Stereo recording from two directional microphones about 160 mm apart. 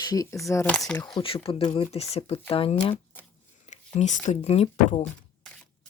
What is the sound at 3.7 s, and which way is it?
Speech, 50° left (ahead or behind).